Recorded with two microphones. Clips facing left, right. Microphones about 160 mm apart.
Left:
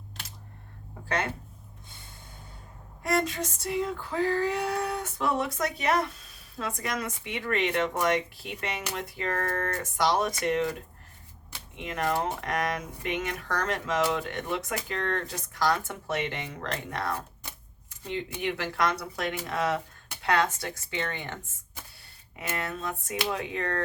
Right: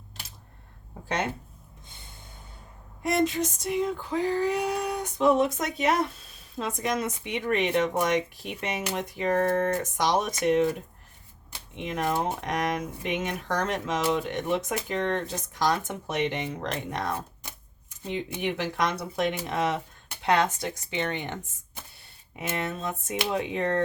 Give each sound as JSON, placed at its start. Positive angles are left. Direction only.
{"t": 1.0, "sound": "speech", "side_deg": -20}
{"t": 3.0, "sound": "speech", "side_deg": -20}
{"t": 11.9, "sound": "speech", "side_deg": -20}
{"t": 22.4, "sound": "speech", "side_deg": -20}